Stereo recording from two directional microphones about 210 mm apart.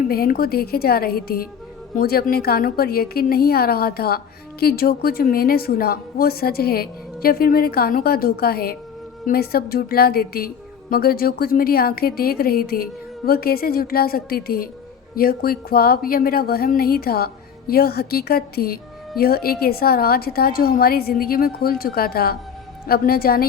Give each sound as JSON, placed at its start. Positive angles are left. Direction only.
{"t": 0.1, "sound": "a woman's voice", "side_deg": 45}